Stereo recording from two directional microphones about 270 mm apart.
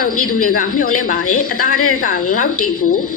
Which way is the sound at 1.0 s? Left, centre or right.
Left.